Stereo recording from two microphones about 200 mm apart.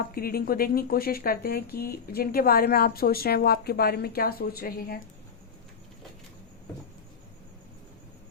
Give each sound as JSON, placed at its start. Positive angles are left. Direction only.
{"t": 0.0, "sound": "speech", "side_deg": 50}